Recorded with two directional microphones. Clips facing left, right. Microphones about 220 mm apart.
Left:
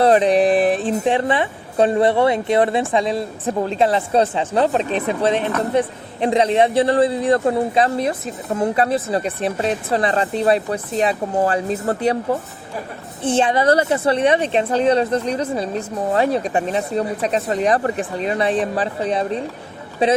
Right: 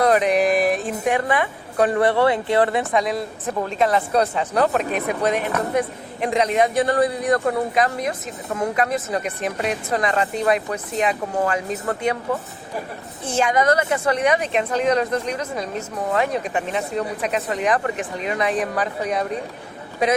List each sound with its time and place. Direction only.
0.0 s speech: 30° left (ahead or behind)